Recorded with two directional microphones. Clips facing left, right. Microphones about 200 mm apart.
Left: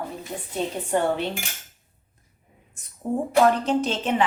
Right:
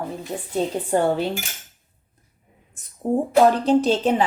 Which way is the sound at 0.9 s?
35° right (ahead or behind).